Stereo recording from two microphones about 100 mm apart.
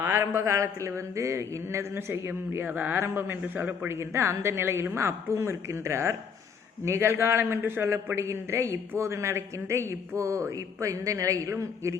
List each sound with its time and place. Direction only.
0.0 s a man's voice: 30° right (ahead or behind)